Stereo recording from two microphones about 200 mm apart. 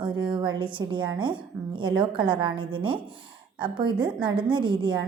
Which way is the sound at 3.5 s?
25° right (ahead or behind).